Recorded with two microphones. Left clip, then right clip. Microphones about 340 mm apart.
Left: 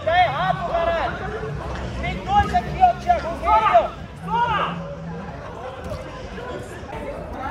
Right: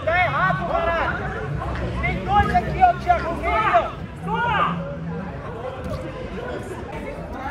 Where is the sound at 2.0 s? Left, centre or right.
Left.